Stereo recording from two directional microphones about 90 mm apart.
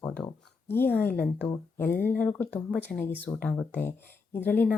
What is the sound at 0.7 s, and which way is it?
A woman's voice, 25° left (ahead or behind).